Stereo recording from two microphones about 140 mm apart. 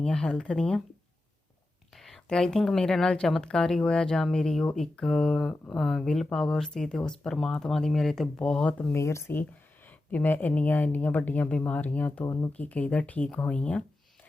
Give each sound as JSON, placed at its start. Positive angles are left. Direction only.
{"t": 0.0, "sound": "speech", "side_deg": 5}
{"t": 2.0, "sound": "speech", "side_deg": 0}
{"t": 8.8, "sound": "speech", "side_deg": 20}
{"t": 12.2, "sound": "speech", "side_deg": 20}
{"t": 12.5, "sound": "speech", "side_deg": 10}